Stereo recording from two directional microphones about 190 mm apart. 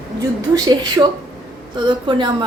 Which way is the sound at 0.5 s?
20° right (ahead or behind).